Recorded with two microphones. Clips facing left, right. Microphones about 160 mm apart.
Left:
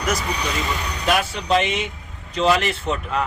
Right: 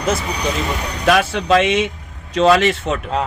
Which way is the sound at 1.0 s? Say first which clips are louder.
Right 6 dB; 90° right.